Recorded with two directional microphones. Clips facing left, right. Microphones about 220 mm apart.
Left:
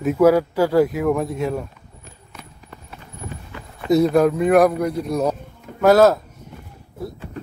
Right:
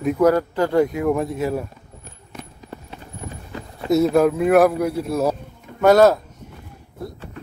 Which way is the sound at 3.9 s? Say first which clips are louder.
Left 1 dB; centre (ahead or behind).